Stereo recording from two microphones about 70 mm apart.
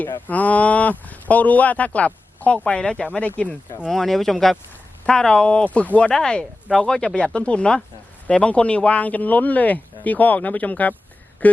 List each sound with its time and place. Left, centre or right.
0.3 s speech: left
3.9 s speech: centre
5.6 s speech: left